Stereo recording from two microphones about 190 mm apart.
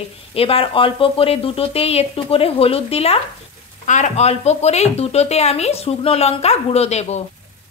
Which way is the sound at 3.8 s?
40° left (ahead or behind).